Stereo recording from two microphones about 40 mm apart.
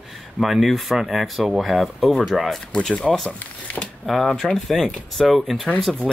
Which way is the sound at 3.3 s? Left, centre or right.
Left.